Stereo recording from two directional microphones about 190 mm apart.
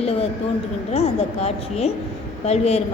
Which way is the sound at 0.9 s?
35° left (ahead or behind).